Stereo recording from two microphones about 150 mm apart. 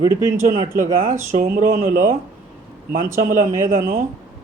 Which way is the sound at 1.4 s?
55° right (ahead or behind).